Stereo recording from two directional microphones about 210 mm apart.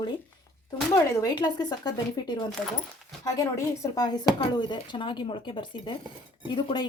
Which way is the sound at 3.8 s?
15° left (ahead or behind).